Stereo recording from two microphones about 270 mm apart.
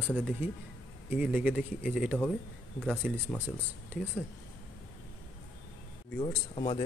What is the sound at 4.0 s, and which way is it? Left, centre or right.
Speech, centre.